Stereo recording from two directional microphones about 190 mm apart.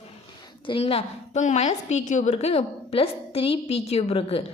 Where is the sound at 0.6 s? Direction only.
30° left (ahead or behind).